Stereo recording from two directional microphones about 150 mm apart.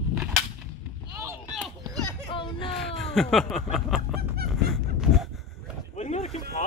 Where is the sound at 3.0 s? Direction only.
5° left (ahead or behind).